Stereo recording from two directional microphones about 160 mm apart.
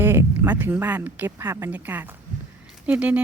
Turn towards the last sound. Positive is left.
turn(degrees=-10)  # may be behind; listen again after turning